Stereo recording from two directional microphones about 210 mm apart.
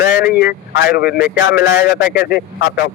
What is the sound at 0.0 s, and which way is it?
Speech, 50° left (ahead or behind).